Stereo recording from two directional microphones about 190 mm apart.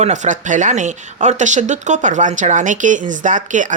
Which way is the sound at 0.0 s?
40° right (ahead or behind).